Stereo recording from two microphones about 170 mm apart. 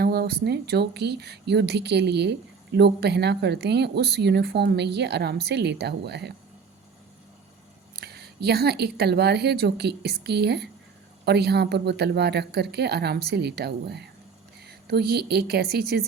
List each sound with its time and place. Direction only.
0.0 s speech: 70° right (ahead or behind)
7.9 s speech: 70° right (ahead or behind)